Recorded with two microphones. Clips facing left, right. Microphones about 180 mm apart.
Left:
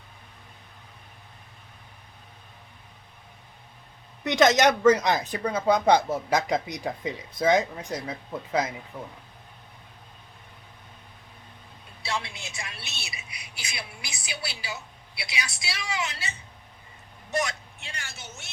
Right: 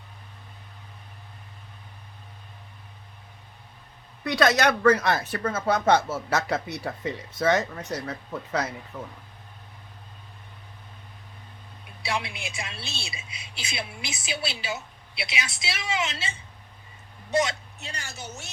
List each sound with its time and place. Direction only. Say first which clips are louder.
4.2 s a woman's voice: left 2 dB; 20° left (ahead or behind)
12.0 s a woman's voice: right 2 dB; 20° right (ahead or behind)
17.7 s a woman's voice: right 3 dB; 40° right (ahead or behind)